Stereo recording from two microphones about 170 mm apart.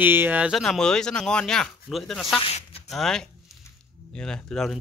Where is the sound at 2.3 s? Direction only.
35° left (ahead or behind).